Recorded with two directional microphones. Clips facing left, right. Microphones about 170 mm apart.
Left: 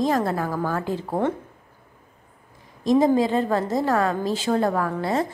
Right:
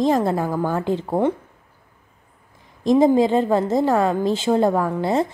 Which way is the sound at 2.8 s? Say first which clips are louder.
Right 3 dB; 25° right (ahead or behind).